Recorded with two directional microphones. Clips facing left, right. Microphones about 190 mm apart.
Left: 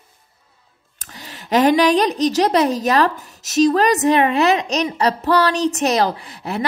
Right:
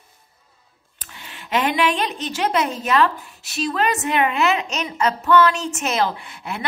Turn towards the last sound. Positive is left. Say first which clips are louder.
# left 6 dB
turn(degrees=35)  # may be behind; listen again after turning